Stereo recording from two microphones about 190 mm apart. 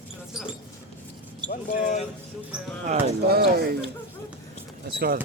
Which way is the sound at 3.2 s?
55° right (ahead or behind).